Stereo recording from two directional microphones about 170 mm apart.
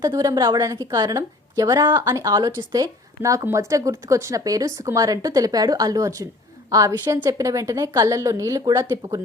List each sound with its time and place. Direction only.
0.0 s speech: 20° right (ahead or behind)